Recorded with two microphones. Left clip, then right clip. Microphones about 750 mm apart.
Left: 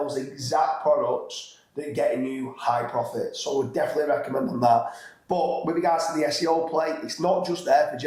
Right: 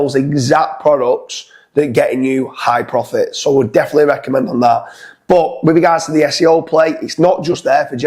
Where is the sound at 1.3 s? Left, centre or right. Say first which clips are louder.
Right 13 dB; right.